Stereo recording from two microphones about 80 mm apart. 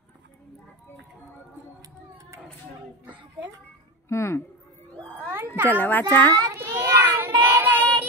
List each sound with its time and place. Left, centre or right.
1.8 s a sound: right
4.1 s speech: left
5.2 s cat: right
5.7 s a child's voice: left
6.5 s child singing: right